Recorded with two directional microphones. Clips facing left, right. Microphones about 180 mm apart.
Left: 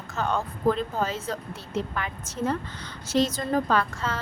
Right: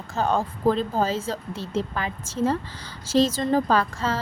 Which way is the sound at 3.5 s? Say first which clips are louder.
Right 3 dB; 35° right (ahead or behind).